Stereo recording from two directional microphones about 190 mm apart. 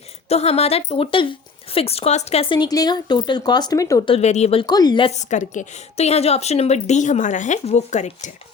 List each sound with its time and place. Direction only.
0.3 s speech: 35° left (ahead or behind); by 4.1 s 15° left (ahead or behind)
4.1 s speech: 35° left (ahead or behind)
5.1 s a woman's voice: 40° left (ahead or behind)